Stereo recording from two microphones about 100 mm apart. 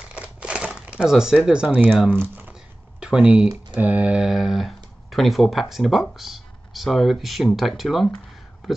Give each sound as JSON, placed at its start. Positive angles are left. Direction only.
{"t": 0.1, "sound": "crumpling", "side_deg": -10}
{"t": 2.0, "sound": "speech", "side_deg": -15}